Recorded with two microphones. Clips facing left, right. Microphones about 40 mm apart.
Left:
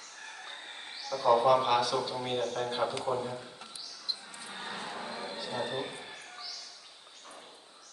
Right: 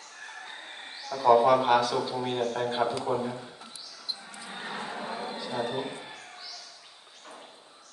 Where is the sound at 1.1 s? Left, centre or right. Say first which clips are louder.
Right 4 dB; centre.